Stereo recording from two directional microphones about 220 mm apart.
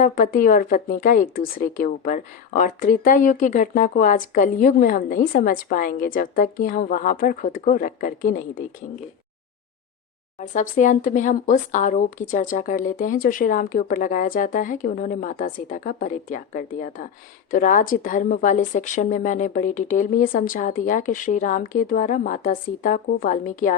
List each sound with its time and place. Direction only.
0.0 s speech: 35° left (ahead or behind)
10.4 s speech: 35° left (ahead or behind)